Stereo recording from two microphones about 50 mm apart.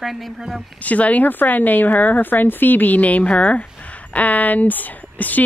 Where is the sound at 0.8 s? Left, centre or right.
Left.